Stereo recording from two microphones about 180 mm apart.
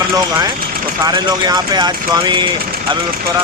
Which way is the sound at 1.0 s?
20° right (ahead or behind).